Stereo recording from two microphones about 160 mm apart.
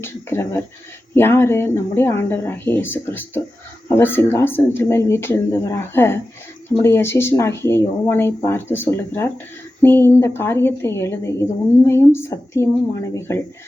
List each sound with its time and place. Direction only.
0.0 s speech: 15° left (ahead or behind)